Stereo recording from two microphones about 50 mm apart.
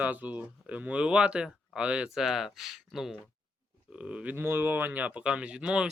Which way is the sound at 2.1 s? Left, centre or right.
Centre.